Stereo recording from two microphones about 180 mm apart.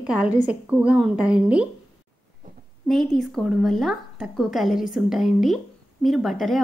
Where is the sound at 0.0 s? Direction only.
5° right (ahead or behind).